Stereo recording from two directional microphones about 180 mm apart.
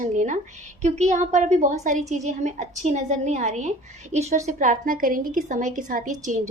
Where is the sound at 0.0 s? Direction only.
45° right (ahead or behind).